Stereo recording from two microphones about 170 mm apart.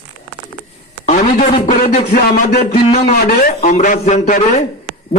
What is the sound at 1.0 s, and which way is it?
A man's voice, 50° left (ahead or behind).